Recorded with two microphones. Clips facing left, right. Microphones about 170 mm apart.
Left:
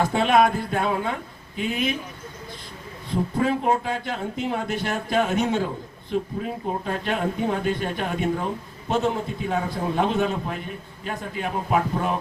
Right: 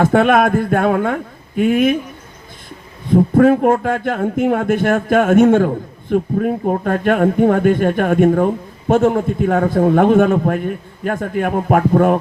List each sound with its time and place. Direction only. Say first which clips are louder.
0.0 s speech: right 7 dB; 50° right (ahead or behind)
3.1 s speech: right 12 dB; 50° right (ahead or behind)